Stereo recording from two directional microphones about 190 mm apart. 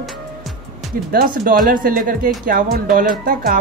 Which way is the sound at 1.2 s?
45° right (ahead or behind).